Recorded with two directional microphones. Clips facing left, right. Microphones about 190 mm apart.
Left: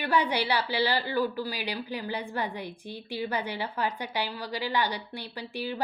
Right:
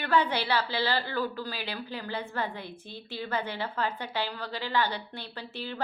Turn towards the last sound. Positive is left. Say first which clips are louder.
# left 4 dB
turn(degrees=10)  # may be behind; listen again after turning